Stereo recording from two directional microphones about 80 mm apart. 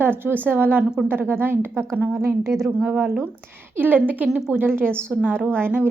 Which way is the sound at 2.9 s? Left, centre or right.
Centre.